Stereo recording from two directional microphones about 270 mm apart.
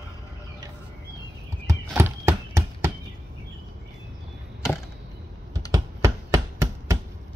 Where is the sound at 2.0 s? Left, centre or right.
Centre.